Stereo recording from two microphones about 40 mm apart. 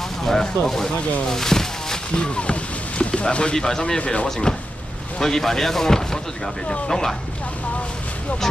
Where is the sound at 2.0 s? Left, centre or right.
Left.